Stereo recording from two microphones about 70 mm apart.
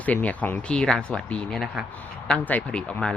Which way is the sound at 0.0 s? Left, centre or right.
Left.